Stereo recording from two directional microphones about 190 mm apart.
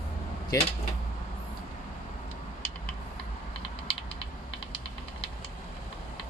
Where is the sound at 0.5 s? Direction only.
20° left (ahead or behind).